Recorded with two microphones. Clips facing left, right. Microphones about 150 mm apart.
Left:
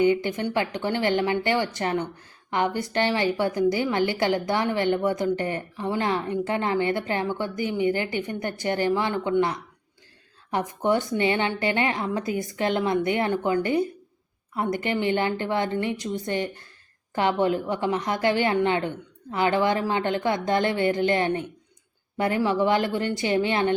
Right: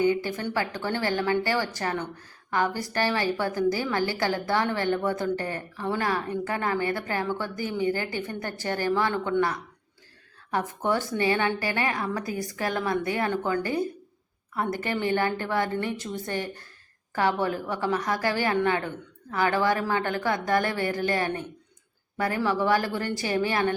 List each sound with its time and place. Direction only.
0.0 s a woman's voice: 20° left (ahead or behind)